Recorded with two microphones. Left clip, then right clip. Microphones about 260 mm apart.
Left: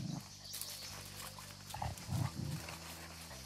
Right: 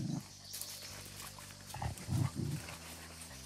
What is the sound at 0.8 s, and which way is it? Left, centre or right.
Pig, centre.